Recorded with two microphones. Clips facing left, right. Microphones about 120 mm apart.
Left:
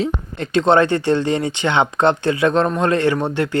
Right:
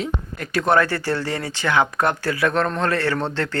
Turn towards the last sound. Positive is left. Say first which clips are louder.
# left 5 dB
turn(degrees=15)  # may be behind; listen again after turning